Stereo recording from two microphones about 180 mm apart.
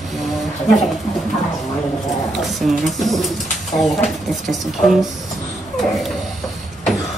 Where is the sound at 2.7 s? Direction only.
Centre (ahead or behind).